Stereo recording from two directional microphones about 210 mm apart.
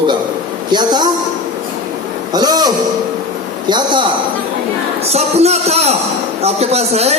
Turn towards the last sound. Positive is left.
turn(degrees=-30)  # may be behind; listen again after turning